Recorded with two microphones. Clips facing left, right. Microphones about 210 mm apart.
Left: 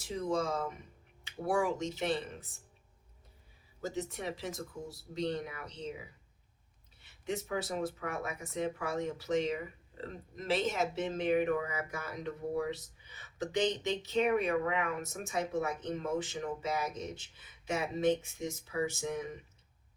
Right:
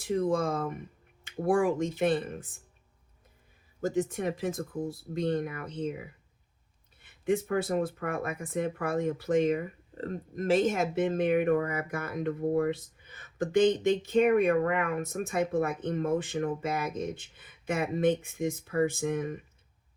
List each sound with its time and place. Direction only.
0.0 s speech: 55° right (ahead or behind)
3.8 s speech: 50° right (ahead or behind)